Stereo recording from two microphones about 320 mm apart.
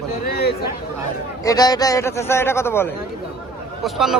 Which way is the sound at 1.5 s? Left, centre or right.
Centre.